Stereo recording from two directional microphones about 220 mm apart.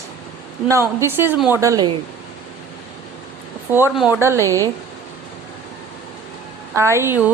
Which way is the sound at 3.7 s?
10° right (ahead or behind).